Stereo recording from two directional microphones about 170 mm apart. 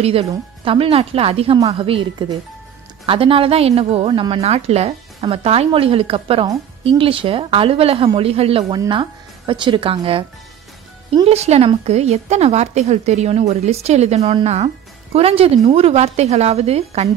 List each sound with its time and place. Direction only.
0.0 s speech: 35° right (ahead or behind)
11.2 s speech: 40° right (ahead or behind)